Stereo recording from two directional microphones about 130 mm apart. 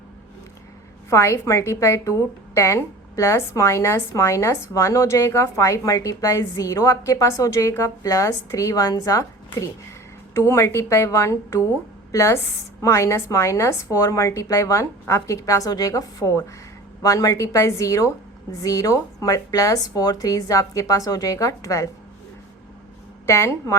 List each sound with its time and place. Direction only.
1.1 s a woman's voice: 20° left (ahead or behind)
23.2 s a woman's voice: 20° left (ahead or behind)